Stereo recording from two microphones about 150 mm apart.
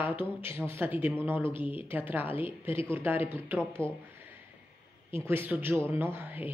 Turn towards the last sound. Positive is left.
turn(degrees=-15)  # may be behind; listen again after turning